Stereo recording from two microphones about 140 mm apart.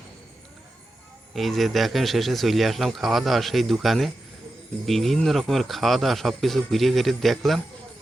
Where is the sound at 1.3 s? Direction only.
Centre (ahead or behind).